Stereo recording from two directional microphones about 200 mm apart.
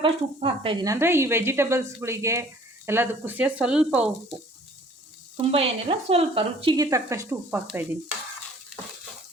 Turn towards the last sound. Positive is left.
turn(degrees=-10)  # may be behind; listen again after turning